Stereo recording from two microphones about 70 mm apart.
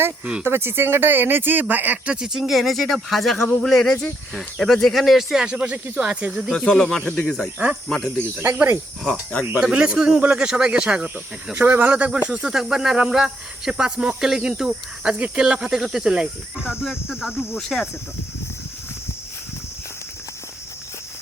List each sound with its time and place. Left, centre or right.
0.4 s speech: right
2.1 s speech: centre
6.7 s speech: centre
8.4 s speech: right
9.7 s speech: centre
11.5 s speech: right; by 17.8 s centre